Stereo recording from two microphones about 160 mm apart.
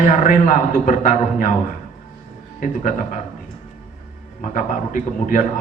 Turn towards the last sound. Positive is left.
turn(degrees=55)  # may be behind; listen again after turning